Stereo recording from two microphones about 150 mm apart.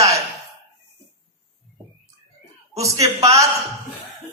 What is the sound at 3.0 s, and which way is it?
Speech, 20° right (ahead or behind).